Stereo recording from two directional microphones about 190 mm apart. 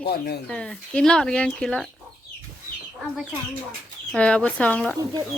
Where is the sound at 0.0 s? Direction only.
55° left (ahead or behind).